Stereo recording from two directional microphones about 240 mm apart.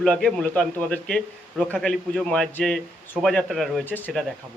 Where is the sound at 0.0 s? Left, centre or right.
Centre.